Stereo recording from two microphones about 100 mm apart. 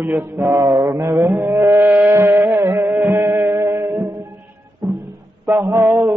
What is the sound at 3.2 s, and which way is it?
Music, 25° right (ahead or behind).